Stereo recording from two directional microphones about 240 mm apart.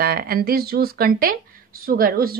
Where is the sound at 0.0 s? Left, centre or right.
Right.